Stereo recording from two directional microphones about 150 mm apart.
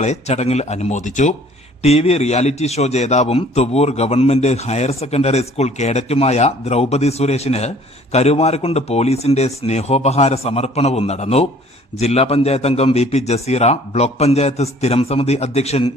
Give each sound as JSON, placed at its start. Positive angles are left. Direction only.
{"t": 0.0, "sound": "a man's voice", "side_deg": 50}
{"t": 1.8, "sound": "a man's voice", "side_deg": 45}